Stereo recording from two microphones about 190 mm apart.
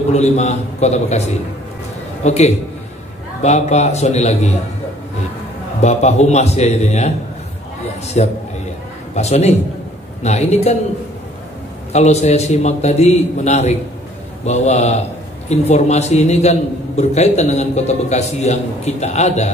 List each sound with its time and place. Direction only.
0.1 s a man's voice: 35° left (ahead or behind)
2.2 s a man's voice: 35° left (ahead or behind)
5.8 s a man's voice: 35° left (ahead or behind)
8.2 s a man's voice: 35° left (ahead or behind)
11.9 s a man's voice: 35° left (ahead or behind)